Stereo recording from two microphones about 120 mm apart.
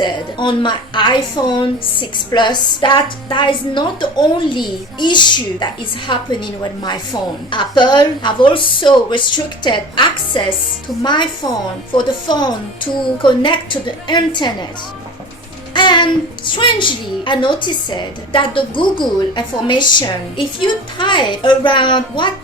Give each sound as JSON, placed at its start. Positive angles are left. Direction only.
{"t": 0.0, "sound": "a woman's voice", "side_deg": 40}
{"t": 15.7, "sound": "music", "side_deg": 40}
{"t": 16.6, "sound": "a woman's voice", "side_deg": 40}